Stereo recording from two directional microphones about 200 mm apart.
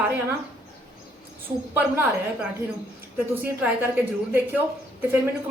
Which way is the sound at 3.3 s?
10° right (ahead or behind).